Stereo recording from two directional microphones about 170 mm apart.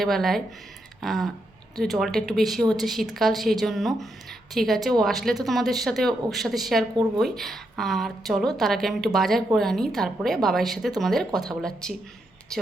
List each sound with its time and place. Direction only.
0.0 s speech: centre (ahead or behind)